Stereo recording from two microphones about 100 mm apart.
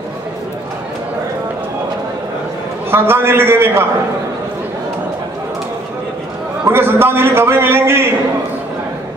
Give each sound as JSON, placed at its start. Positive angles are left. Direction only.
{"t": 2.9, "sound": "a man's voice", "side_deg": -25}
{"t": 6.6, "sound": "a man's voice", "side_deg": -25}